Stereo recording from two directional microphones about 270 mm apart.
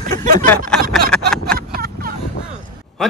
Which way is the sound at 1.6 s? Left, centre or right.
Right.